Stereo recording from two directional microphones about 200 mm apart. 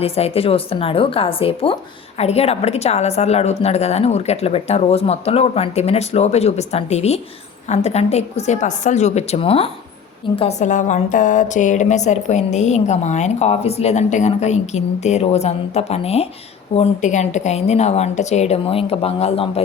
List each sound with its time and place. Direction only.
0.0 s a woman's voice: 30° left (ahead or behind)